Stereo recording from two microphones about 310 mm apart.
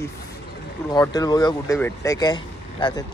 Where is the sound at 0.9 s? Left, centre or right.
Centre.